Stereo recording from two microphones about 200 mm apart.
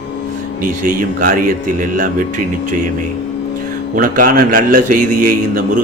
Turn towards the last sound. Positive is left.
turn(degrees=-45)  # may be behind; listen again after turning